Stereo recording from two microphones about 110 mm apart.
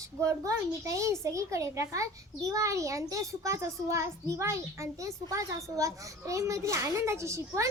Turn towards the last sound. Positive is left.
turn(degrees=-25)  # may be behind; listen again after turning